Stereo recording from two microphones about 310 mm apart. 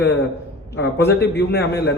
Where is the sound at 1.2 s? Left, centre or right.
Left.